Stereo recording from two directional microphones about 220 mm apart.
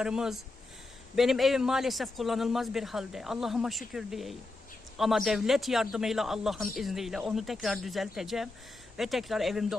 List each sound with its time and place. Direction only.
0.0 s a man's voice: 5° right (ahead or behind)